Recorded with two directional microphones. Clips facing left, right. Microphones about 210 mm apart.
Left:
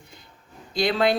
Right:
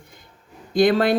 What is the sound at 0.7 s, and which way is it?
Speech, 50° right (ahead or behind).